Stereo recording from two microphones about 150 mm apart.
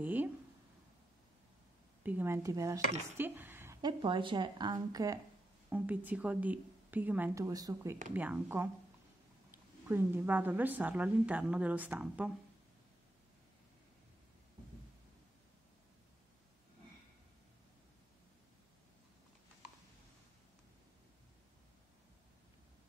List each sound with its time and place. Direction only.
0.0 s speech: 10° right (ahead or behind)
2.0 s speech: 15° right (ahead or behind)
3.2 s a sound: 15° right (ahead or behind)
3.8 s speech: 35° right (ahead or behind)
5.7 s a woman's voice: 10° right (ahead or behind)
8.1 s a woman's voice: 10° right (ahead or behind)